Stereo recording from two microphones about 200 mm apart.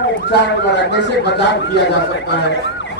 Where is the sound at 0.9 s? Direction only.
60° left (ahead or behind).